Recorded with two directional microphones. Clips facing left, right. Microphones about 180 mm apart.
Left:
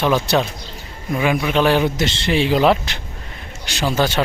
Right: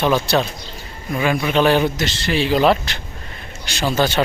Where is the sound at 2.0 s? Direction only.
25° left (ahead or behind).